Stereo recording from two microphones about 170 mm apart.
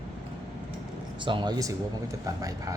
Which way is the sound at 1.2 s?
30° right (ahead or behind).